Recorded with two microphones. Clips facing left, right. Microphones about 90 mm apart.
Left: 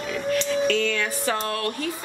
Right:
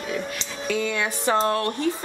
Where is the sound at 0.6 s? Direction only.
10° right (ahead or behind); by 1.9 s 30° right (ahead or behind).